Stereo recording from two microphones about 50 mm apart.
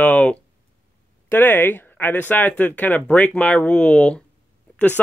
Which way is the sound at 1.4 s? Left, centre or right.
Left.